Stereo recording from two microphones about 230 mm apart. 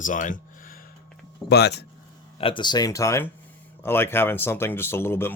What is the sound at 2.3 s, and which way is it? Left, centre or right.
Speech, left.